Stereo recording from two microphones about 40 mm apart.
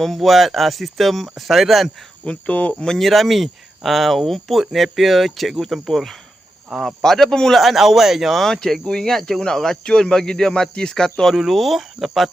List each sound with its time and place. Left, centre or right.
0.0 s speech: centre
2.2 s speech: left
3.0 s speech: centre
7.0 s speech: centre
7.5 s speech: centre
8.4 s speech: centre
11.3 s speech: centre